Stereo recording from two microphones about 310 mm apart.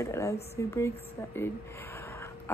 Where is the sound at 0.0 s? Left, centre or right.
Centre.